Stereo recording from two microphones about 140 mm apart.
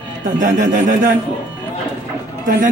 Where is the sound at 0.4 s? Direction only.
80° right.